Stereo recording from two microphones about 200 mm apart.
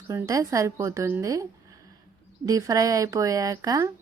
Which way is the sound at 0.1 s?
15° right (ahead or behind).